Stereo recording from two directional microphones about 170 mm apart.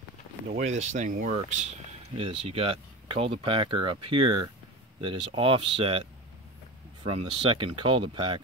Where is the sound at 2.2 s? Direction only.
35° right (ahead or behind).